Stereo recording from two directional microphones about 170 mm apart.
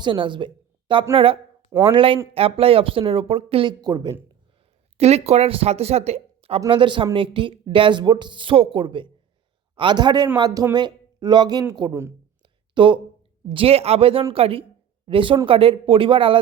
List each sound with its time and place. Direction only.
0.0 s a woman's voice: 30° right (ahead or behind)
4.9 s a woman's voice: 40° right (ahead or behind)